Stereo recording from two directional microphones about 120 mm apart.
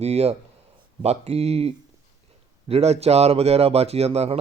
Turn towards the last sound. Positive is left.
turn(degrees=-60)  # may be behind; listen again after turning